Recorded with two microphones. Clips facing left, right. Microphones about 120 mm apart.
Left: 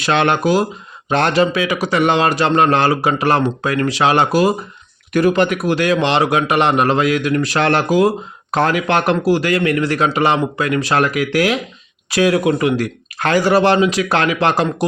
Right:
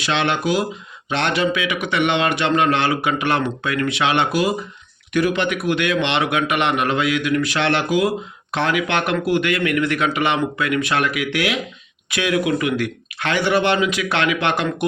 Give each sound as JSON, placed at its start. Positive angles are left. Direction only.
{"t": 0.0, "sound": "a man's voice", "side_deg": 50}